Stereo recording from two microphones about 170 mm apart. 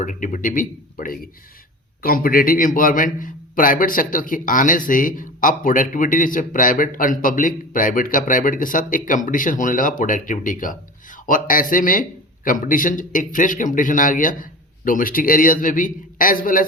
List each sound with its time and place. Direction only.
0.0 s a man's voice: 50° left (ahead or behind)